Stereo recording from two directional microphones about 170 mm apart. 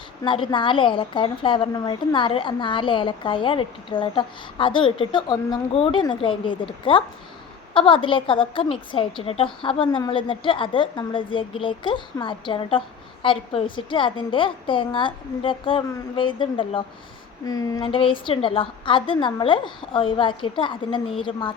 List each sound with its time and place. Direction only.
0.3 s a woman's voice: 30° left (ahead or behind)